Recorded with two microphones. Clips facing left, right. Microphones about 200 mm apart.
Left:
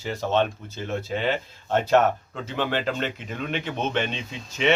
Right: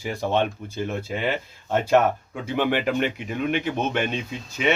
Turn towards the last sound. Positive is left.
turn(degrees=-10)  # may be behind; listen again after turning